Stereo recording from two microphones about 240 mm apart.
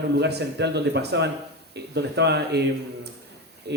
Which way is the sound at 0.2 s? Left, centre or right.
Right.